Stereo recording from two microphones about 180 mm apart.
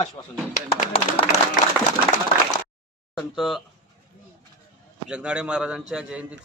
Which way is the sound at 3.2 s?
Centre (ahead or behind).